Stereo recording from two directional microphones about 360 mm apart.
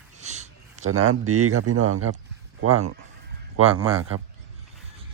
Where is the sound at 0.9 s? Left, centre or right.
Right.